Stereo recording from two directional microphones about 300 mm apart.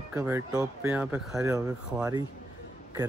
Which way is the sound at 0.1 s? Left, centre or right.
Centre.